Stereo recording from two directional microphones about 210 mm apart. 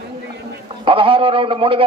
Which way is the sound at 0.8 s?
25° right (ahead or behind).